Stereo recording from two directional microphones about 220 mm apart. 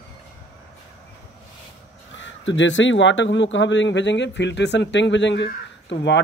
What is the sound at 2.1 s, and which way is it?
Speech, 55° left (ahead or behind).